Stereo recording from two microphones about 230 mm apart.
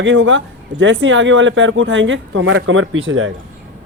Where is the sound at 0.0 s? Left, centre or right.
Right.